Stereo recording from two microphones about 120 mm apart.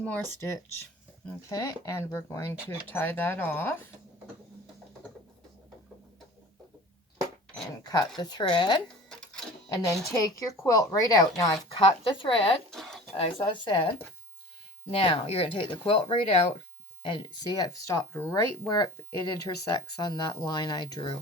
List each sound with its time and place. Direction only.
0.0 s speech: 15° left (ahead or behind)
1.5 s a woman's voice: 25° left (ahead or behind)
7.9 s speech: 35° left (ahead or behind)
10.1 s a woman's voice: 30° left (ahead or behind)
11.8 s speech: 45° left (ahead or behind)
12.7 s a sound: 5° left (ahead or behind)
13.1 s speech: 45° left (ahead or behind)
17.0 s a woman's voice: 40° left (ahead or behind)